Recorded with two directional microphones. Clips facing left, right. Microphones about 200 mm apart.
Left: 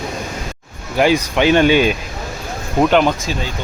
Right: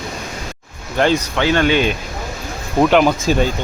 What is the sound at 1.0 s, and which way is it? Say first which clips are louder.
Speech: left 2 dB; 10° left (ahead or behind).